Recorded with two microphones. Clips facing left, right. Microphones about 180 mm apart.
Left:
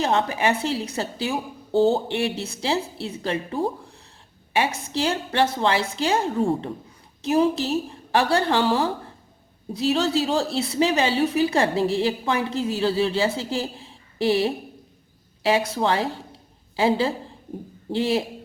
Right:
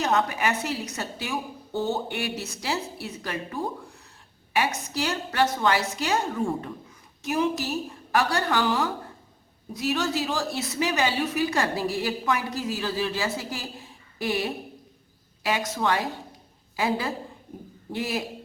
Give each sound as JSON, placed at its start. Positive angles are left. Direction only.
{"t": 0.0, "sound": "a woman's voice", "side_deg": 30}